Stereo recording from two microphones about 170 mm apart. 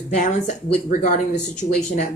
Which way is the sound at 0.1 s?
45° left (ahead or behind).